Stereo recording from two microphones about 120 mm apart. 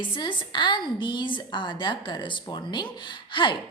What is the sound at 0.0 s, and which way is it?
A woman's voice, 40° left (ahead or behind).